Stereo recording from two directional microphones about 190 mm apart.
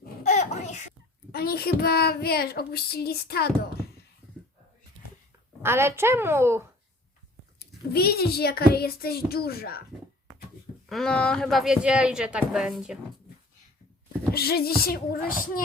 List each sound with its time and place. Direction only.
0.2 s a sound: 40° left (ahead or behind)
1.3 s a child's voice: 55° left (ahead or behind)
5.6 s a woman's voice: 15° right (ahead or behind)
7.9 s a child's voice: 55° left (ahead or behind)
10.8 s speech: centre (ahead or behind)
14.3 s music: 55° left (ahead or behind)